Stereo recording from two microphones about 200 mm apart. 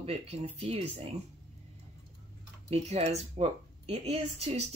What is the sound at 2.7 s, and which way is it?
Speech, 30° right (ahead or behind).